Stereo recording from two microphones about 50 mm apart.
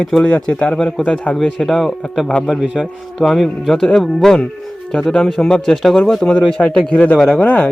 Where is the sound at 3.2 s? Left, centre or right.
Centre; by 7.6 s left.